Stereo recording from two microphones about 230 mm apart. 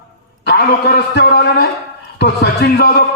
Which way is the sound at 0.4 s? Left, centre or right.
Left.